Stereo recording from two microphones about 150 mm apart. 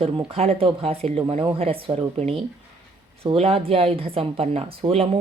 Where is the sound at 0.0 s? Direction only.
40° right (ahead or behind).